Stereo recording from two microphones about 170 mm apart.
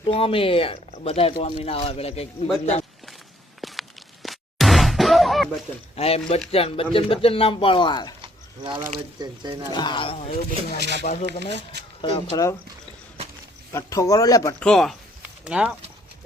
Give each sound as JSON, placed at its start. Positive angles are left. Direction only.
{"t": 0.0, "sound": "speech", "side_deg": 35}
{"t": 3.6, "sound": "a sound", "side_deg": 0}
{"t": 6.0, "sound": "speech", "side_deg": 35}
{"t": 8.2, "sound": "a sound", "side_deg": -30}
{"t": 9.1, "sound": "speech", "side_deg": -25}
{"t": 9.6, "sound": "speech", "side_deg": 25}
{"t": 10.8, "sound": "speech", "side_deg": -90}
{"t": 11.0, "sound": "speech", "side_deg": 45}
{"t": 11.3, "sound": "speech", "side_deg": -80}
{"t": 12.0, "sound": "speech", "side_deg": 35}
{"t": 13.7, "sound": "speech", "side_deg": 20}
{"t": 14.6, "sound": "speech", "side_deg": 5}